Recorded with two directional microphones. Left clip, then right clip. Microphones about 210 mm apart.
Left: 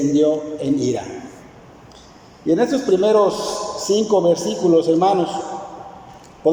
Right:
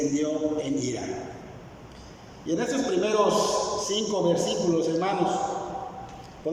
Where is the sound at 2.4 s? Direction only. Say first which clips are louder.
Left 9 dB; 20° left (ahead or behind).